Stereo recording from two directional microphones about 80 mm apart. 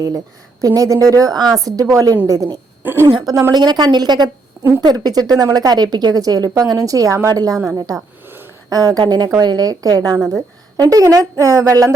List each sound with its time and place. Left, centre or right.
0.6 s a woman's voice: right
2.8 s a woman's voice: right
3.5 s a woman's voice: right